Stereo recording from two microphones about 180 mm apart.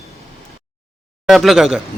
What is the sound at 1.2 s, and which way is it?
Speech, centre (ahead or behind).